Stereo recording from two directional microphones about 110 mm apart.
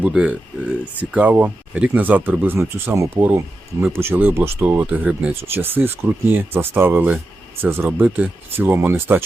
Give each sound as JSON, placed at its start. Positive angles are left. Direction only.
{"t": 0.0, "sound": "speech", "side_deg": -10}